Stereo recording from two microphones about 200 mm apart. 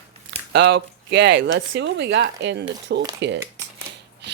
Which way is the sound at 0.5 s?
60° right (ahead or behind).